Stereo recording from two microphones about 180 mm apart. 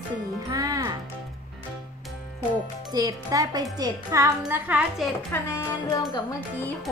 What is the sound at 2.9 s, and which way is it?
Speech, 20° right (ahead or behind).